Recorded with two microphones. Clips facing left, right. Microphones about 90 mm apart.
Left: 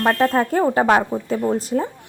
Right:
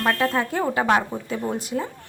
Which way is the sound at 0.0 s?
40° left (ahead or behind).